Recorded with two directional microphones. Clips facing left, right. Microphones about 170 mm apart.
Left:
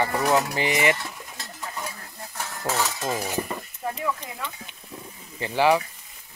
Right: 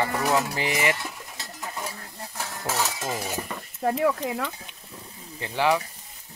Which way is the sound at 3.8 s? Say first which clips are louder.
Right 8 dB; 65° right (ahead or behind).